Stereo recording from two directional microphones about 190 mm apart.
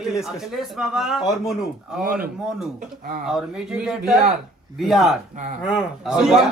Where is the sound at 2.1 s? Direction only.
50° right (ahead or behind).